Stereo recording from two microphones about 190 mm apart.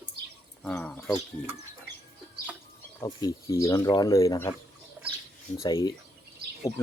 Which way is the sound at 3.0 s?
20° left (ahead or behind).